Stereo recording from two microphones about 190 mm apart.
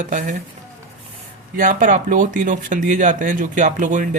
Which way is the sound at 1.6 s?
45° right (ahead or behind).